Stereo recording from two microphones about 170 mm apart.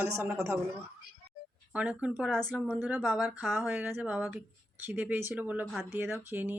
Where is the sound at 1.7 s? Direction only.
5° right (ahead or behind).